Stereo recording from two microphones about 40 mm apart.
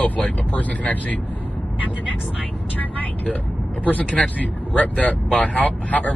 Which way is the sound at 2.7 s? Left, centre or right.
Left.